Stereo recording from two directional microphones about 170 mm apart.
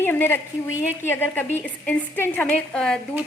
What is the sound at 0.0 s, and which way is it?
A woman's voice, 10° left (ahead or behind).